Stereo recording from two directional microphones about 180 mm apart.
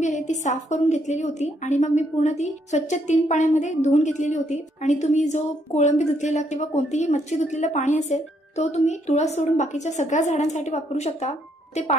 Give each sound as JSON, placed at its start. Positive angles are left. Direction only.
{"t": 0.0, "sound": "a woman's voice", "side_deg": 40}